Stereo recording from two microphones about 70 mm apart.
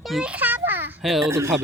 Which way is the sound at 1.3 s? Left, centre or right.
Right.